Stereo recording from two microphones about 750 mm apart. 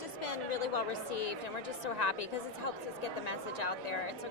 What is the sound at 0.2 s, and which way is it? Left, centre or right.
Chatter, left.